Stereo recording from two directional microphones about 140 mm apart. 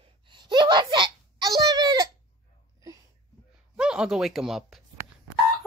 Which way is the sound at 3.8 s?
5° right (ahead or behind).